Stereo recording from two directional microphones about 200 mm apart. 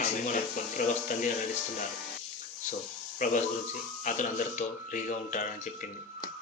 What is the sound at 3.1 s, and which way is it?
A man's voice, 40° left (ahead or behind).